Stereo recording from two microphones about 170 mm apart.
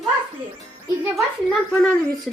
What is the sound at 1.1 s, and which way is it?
Speech, 5° left (ahead or behind).